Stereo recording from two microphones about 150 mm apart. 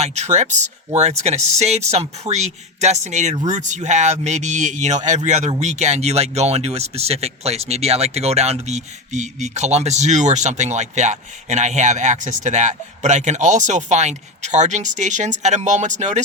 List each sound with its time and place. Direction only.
0.0 s speech: 50° right (ahead or behind)